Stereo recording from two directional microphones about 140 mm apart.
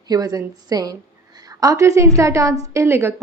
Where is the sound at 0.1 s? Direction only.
25° right (ahead or behind).